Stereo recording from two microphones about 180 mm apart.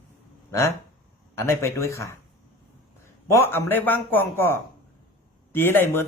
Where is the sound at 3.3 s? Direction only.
15° left (ahead or behind).